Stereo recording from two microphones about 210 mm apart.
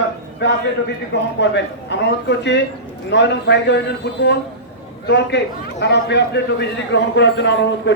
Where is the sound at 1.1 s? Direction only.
55° left (ahead or behind).